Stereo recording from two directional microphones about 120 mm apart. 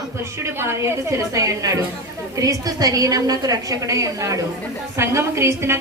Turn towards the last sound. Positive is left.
turn(degrees=-20)  # may be behind; listen again after turning